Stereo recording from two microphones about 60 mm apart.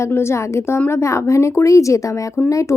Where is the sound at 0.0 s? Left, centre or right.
Left.